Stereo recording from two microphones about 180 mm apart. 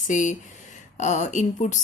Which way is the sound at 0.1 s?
45° left (ahead or behind).